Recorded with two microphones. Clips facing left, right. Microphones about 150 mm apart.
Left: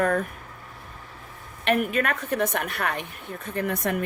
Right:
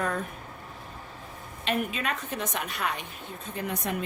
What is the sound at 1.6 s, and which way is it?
A woman's voice, 60° left (ahead or behind).